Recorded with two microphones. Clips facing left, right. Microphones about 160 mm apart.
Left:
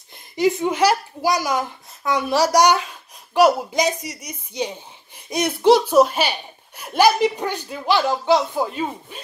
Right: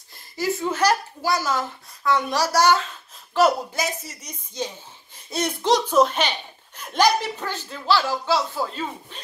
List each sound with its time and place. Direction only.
0.4 s speech: 15° left (ahead or behind)